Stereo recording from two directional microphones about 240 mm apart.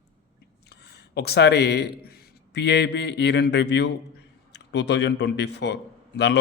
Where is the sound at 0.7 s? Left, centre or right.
Left.